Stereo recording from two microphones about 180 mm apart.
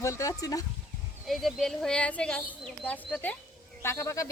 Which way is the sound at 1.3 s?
Centre (ahead or behind).